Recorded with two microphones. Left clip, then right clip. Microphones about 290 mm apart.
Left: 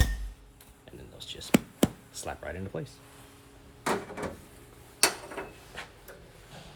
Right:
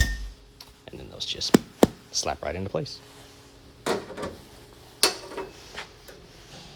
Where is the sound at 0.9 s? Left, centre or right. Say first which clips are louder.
Right 10 dB; right.